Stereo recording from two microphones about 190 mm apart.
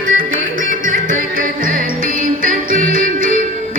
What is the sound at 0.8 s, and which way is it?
Music, 45° right (ahead or behind).